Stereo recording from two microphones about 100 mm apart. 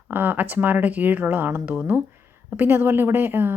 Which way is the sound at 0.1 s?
20° right (ahead or behind).